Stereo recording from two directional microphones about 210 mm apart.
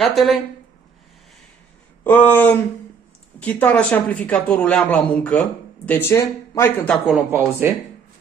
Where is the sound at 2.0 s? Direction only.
10° left (ahead or behind); by 7.7 s 10° right (ahead or behind).